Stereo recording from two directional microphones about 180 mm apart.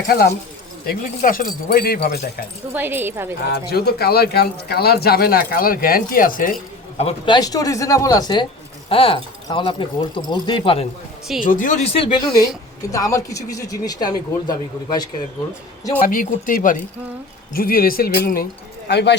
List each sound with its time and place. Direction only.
0.1 s speech: 55° left (ahead or behind)
2.7 s a woman's voice: 10° right (ahead or behind)
3.4 s speech: 60° left (ahead or behind)
7.0 s speech: 25° left (ahead or behind)
11.3 s speech: 45° left (ahead or behind)
12.9 s speech: 20° left (ahead or behind)
16.0 s speech: 50° left (ahead or behind)
18.9 s speech: 70° left (ahead or behind)